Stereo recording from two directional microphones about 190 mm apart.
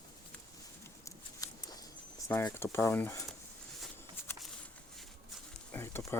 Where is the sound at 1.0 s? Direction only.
20° left (ahead or behind).